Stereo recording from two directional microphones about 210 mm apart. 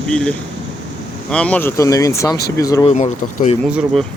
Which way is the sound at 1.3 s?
5° left (ahead or behind).